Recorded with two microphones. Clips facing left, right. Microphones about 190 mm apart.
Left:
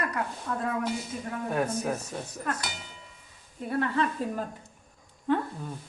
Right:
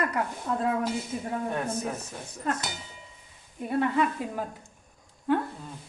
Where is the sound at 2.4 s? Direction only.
25° right (ahead or behind).